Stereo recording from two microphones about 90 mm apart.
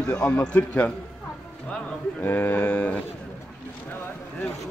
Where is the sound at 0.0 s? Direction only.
15° left (ahead or behind).